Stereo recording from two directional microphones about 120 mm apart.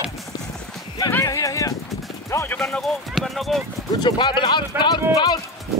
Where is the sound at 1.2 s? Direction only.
25° left (ahead or behind).